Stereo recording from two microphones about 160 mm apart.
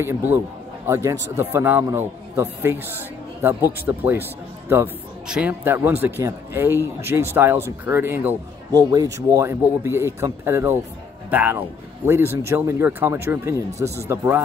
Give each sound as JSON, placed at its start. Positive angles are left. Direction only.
{"t": 0.0, "sound": "speech", "side_deg": -15}
{"t": 8.7, "sound": "speech", "side_deg": -20}